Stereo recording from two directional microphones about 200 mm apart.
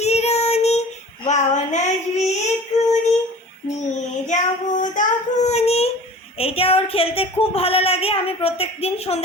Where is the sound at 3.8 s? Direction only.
35° left (ahead or behind).